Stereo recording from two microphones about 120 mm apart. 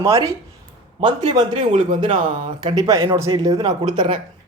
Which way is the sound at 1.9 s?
45° right (ahead or behind).